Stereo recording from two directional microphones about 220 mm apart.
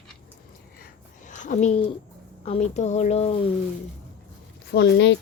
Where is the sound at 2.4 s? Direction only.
30° left (ahead or behind).